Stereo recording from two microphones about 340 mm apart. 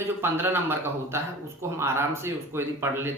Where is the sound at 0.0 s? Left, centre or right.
Centre.